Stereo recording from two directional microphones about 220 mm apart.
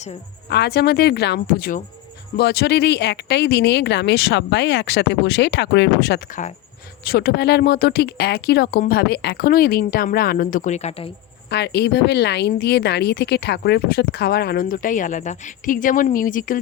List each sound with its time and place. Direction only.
0.5 s speech: 45° left (ahead or behind); by 11.1 s 30° left (ahead or behind)
11.4 s speech: 50° left (ahead or behind)